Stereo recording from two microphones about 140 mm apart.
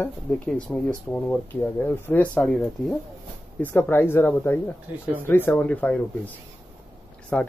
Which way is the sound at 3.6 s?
15° left (ahead or behind).